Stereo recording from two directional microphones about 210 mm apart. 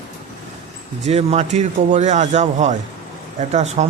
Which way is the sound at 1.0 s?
30° right (ahead or behind).